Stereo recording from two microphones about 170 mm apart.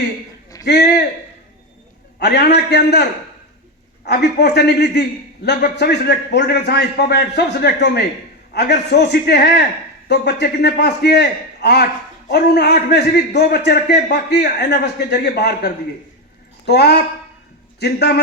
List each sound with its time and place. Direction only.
0.6 s a man's voice: 75° left (ahead or behind)
2.1 s a man's voice: 75° left (ahead or behind)
4.0 s a man's voice: 75° left (ahead or behind)